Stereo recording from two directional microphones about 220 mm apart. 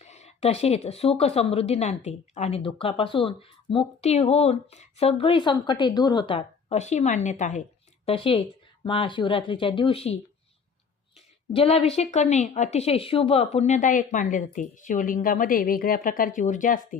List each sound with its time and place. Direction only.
0.0 s speech: 30° left (ahead or behind)
11.5 s a woman's voice: 25° left (ahead or behind)